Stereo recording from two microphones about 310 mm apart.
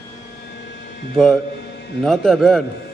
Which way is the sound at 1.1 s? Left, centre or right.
Centre.